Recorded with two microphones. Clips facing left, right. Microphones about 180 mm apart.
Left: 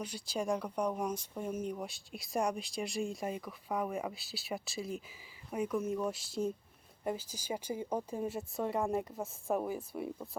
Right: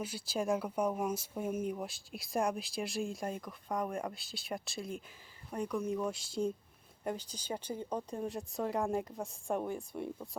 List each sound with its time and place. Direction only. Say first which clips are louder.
0.0 s speech: right 1 dB; 5° right (ahead or behind)